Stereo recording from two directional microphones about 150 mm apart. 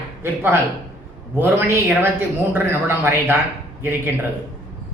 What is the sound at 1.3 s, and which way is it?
A man's voice, 15° right (ahead or behind).